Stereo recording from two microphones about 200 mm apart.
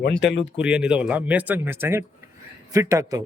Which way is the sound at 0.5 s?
5° right (ahead or behind).